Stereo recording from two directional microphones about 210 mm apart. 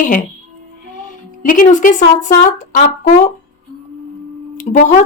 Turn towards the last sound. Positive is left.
turn(degrees=35)  # may be behind; listen again after turning